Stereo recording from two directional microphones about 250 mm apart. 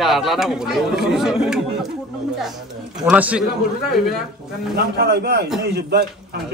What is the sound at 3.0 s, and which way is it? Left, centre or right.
Speech, centre.